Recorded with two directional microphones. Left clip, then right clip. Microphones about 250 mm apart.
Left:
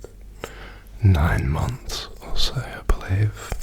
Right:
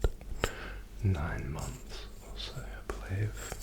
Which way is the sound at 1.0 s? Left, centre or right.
Left.